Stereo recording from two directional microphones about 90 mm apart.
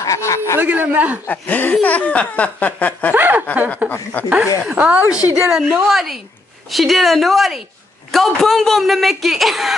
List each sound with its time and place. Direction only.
0.0 s a man's voice: 35° left (ahead or behind)
0.6 s a man's voice: 20° right (ahead or behind)
1.2 s chuckle: 20° left (ahead or behind)
3.2 s chuckle: 20° right (ahead or behind)
3.9 s speech: 20° left (ahead or behind)
4.6 s a man's voice: 10° right (ahead or behind)